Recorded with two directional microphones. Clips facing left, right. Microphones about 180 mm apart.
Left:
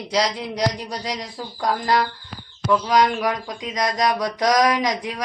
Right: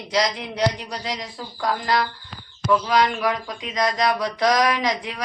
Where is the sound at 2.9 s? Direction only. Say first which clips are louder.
Left 4 dB; 40° left (ahead or behind).